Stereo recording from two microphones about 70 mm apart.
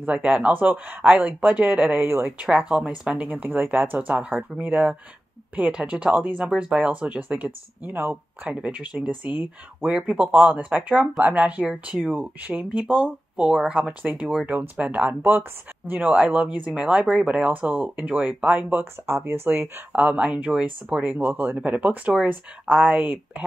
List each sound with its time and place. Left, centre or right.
0.0 s speech: centre
2.0 s speech: right
2.9 s speech: centre
3.3 s speech: right
8.5 s speech: centre
19.0 s speech: right
19.9 s speech: right